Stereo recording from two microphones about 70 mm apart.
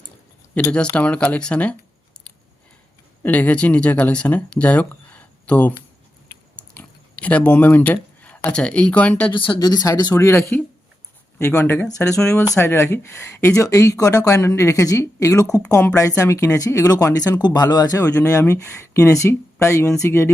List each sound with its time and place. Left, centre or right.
0.6 s speech: left
3.2 s speech: left
6.6 s a sound: left
8.4 s speech: centre
9.6 s speech: left
10.2 s speech: left
11.9 s speech: left
12.5 s speech: left
18.3 s speech: left